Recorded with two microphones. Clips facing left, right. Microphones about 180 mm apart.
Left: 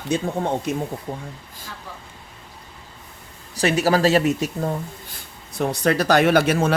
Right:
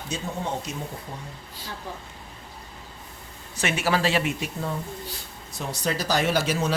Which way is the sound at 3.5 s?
35° left (ahead or behind).